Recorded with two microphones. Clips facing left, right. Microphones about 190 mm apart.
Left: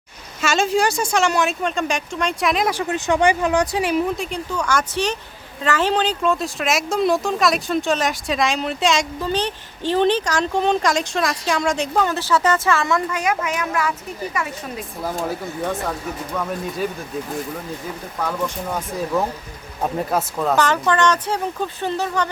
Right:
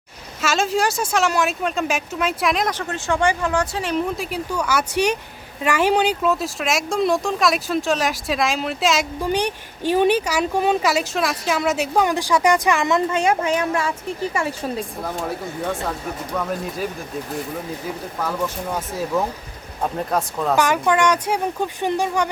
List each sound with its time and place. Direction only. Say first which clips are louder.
0.4 s a woman's voice: left 2 dB; centre (ahead or behind)
4.2 s a woman's voice: even; 5° right (ahead or behind); by 14.8 s 30° right (ahead or behind)
15.9 s a woman's voice: even; centre (ahead or behind)
19.8 s a woman's voice: left 1 dB; 5° left (ahead or behind)
20.6 s speech: right 1 dB; 10° right (ahead or behind)